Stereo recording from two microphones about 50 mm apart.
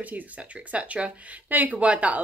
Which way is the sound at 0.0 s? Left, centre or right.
Right.